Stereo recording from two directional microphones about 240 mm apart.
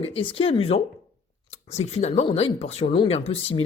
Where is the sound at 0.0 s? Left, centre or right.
Left.